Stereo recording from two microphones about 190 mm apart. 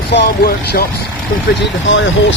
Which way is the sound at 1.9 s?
80° left.